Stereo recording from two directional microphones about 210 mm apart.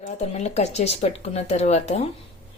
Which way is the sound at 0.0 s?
30° left (ahead or behind).